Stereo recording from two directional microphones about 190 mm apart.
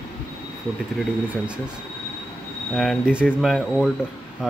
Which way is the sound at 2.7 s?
Centre (ahead or behind).